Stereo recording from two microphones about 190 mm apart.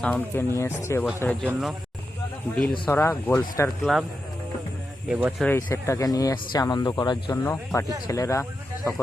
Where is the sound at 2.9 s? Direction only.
15° left (ahead or behind).